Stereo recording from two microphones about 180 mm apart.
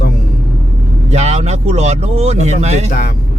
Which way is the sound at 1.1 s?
35° right (ahead or behind).